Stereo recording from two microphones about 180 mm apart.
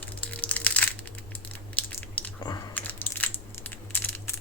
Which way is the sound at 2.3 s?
20° left (ahead or behind).